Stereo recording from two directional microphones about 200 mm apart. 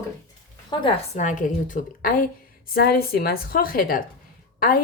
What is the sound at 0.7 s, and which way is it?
A woman's voice, 30° left (ahead or behind).